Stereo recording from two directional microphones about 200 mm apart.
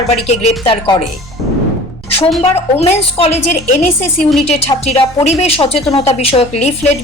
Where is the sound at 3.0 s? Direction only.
30° left (ahead or behind).